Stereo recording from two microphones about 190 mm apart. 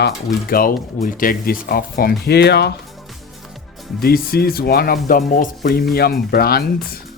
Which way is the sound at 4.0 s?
55° left (ahead or behind).